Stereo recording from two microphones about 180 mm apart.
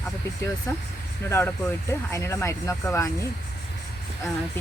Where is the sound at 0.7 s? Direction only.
15° left (ahead or behind).